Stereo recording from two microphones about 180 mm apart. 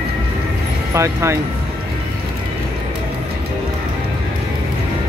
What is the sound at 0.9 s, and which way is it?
Speech, 15° right (ahead or behind).